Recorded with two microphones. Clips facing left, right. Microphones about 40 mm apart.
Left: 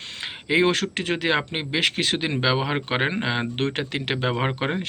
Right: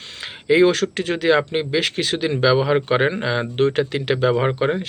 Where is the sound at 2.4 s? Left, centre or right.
Left.